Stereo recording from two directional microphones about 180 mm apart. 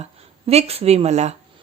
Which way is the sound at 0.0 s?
35° right (ahead or behind).